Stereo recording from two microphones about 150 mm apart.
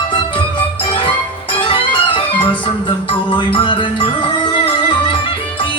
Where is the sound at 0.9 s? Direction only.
35° left (ahead or behind).